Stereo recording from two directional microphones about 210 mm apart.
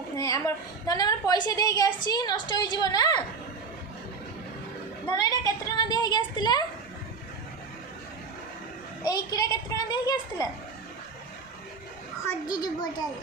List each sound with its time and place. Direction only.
0.2 s a woman's voice: 15° left (ahead or behind)
5.0 s a sound: 20° left (ahead or behind)
9.0 s a woman's voice: 15° left (ahead or behind)
12.5 s a woman's voice: 20° left (ahead or behind)